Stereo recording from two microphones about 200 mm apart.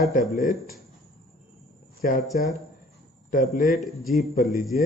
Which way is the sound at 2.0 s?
40° left (ahead or behind).